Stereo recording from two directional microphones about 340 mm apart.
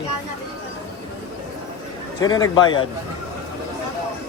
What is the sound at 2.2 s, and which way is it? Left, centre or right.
Speech, centre.